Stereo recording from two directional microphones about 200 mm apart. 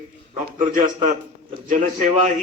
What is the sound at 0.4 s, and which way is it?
A man's voice, 40° right (ahead or behind).